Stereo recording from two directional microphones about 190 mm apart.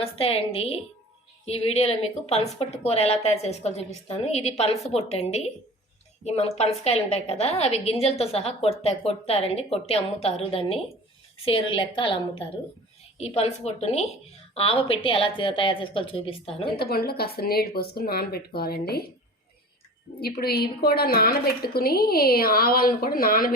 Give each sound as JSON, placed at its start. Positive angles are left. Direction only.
{"t": 0.0, "sound": "a woman's voice", "side_deg": 30}
{"t": 16.6, "sound": "speech", "side_deg": 55}
{"t": 20.1, "sound": "a woman's voice", "side_deg": 55}